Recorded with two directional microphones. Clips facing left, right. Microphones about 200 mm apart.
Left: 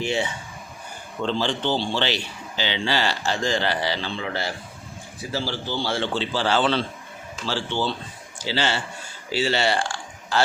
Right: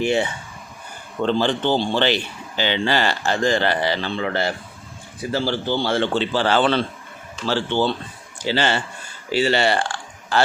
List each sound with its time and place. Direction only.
0.0 s a man's voice: 55° right (ahead or behind)